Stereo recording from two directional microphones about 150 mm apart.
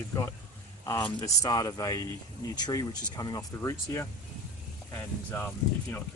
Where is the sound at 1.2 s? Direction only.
25° left (ahead or behind).